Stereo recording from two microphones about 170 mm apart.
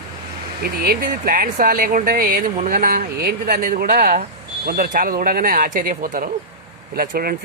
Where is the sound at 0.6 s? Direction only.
65° right (ahead or behind).